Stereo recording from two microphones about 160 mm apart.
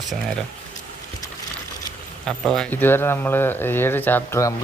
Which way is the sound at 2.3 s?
5° left (ahead or behind).